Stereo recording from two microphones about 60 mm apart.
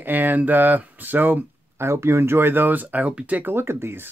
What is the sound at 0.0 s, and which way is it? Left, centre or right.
Speech, right.